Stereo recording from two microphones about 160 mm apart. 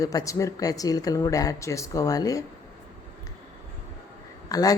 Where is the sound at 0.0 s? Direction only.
20° left (ahead or behind).